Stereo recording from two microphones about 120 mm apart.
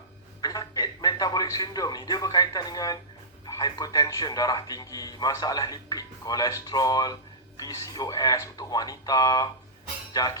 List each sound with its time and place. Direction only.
0.4 s speech: 30° left (ahead or behind)